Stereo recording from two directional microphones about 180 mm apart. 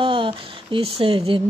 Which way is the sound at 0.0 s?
30° right (ahead or behind).